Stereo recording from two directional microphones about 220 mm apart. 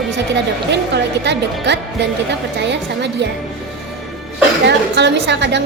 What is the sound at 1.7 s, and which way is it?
A woman's voice, 50° right (ahead or behind).